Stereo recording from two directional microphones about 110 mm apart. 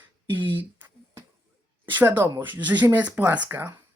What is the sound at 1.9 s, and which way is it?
Speech, 20° right (ahead or behind).